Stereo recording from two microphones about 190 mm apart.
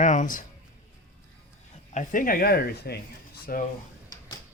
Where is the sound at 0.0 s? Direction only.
40° left (ahead or behind).